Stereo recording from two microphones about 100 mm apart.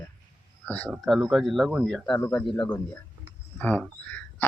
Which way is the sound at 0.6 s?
10° left (ahead or behind).